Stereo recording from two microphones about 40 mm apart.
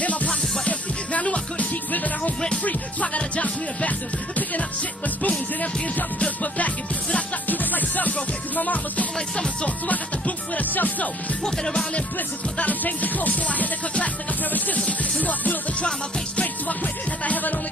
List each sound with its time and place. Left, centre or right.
0.0 s music: left
1.9 s music: left
3.2 s music: left
6.2 s music: left
9.8 s speech: left
11.4 s music: centre
12.5 s music: left